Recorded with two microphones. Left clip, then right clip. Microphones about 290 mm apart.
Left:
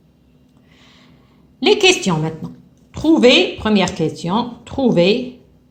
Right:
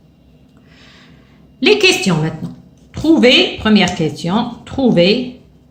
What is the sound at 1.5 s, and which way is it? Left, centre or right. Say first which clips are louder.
Speech: right 2 dB; centre.